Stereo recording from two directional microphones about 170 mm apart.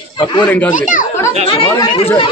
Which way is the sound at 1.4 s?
35° left (ahead or behind).